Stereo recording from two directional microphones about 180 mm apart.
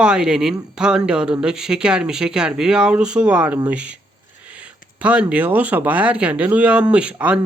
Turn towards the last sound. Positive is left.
turn(degrees=-5)  # may be behind; listen again after turning